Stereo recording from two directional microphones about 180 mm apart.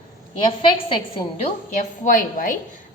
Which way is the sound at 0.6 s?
30° left (ahead or behind).